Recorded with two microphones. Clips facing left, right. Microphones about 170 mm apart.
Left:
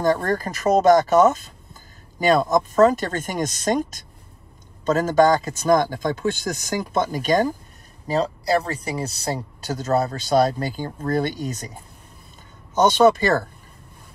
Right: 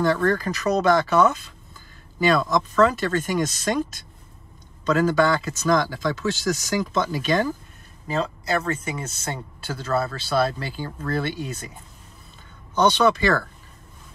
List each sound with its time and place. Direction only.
0.0 s speech: 45° left (ahead or behind)
12.7 s speech: 45° left (ahead or behind)